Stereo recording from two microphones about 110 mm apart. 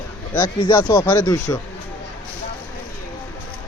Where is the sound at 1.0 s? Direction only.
30° left (ahead or behind).